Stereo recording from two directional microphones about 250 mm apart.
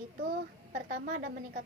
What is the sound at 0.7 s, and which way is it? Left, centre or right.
Speech, right.